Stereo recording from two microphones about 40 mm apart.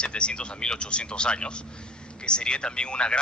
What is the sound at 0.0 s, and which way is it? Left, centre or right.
A man's voice, left.